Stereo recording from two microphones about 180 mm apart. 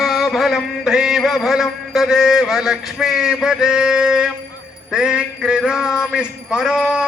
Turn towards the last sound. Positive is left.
turn(degrees=-5)  # may be behind; listen again after turning